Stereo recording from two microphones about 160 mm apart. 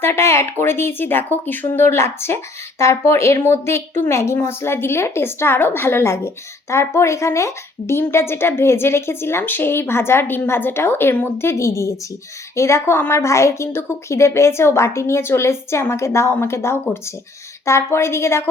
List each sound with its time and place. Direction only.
0.0 s speech: 15° left (ahead or behind)